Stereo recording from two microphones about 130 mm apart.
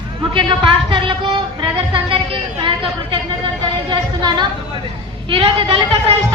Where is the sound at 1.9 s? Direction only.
45° right (ahead or behind).